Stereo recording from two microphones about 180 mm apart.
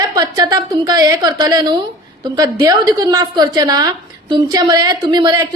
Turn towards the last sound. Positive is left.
turn(degrees=-25)  # may be behind; listen again after turning